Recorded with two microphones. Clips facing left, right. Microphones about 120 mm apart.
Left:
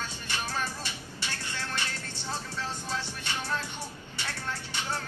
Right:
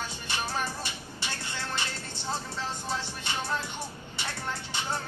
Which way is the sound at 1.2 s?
15° right (ahead or behind).